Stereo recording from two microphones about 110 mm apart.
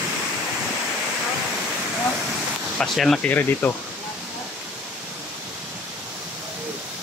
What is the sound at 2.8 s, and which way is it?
Speech, centre (ahead or behind).